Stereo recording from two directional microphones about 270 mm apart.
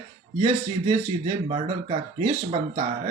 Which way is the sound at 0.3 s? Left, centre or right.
Right.